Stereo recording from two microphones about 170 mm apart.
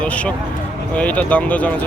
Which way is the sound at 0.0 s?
5° left (ahead or behind).